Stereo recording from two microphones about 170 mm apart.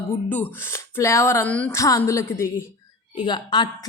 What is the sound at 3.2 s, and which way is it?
Speech, 25° left (ahead or behind).